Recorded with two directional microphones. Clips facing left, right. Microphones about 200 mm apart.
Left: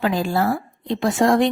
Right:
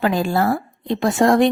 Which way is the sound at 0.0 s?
55° right (ahead or behind).